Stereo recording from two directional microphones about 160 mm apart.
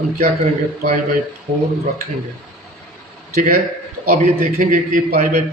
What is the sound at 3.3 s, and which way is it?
A man's voice, 65° right (ahead or behind).